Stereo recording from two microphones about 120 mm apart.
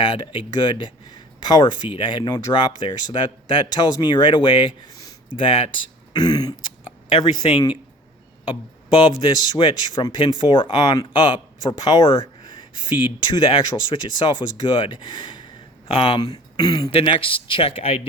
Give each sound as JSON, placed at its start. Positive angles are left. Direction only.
{"t": 0.0, "sound": "speech", "side_deg": 45}
{"t": 4.9, "sound": "a sound", "side_deg": 30}
{"t": 5.4, "sound": "speech", "side_deg": 50}
{"t": 6.1, "sound": "speech", "side_deg": 35}
{"t": 9.0, "sound": "speech", "side_deg": 45}
{"t": 16.2, "sound": "speech", "side_deg": 35}
{"t": 16.9, "sound": "speech", "side_deg": 50}